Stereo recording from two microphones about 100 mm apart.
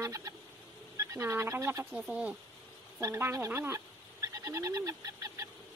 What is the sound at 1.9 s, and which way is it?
Speech, 10° right (ahead or behind).